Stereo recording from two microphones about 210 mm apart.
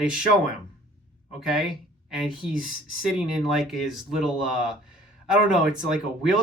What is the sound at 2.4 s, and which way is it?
Speech, centre (ahead or behind).